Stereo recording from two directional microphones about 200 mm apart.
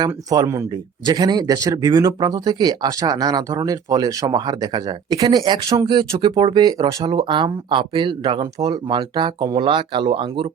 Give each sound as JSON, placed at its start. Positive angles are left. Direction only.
{"t": 0.0, "sound": "speech", "side_deg": -20}